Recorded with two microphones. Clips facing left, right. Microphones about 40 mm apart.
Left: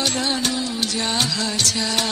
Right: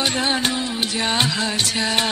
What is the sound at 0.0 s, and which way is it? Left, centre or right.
Music, right.